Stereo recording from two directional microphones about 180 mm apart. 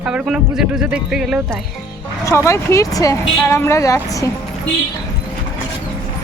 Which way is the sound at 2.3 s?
15° left (ahead or behind).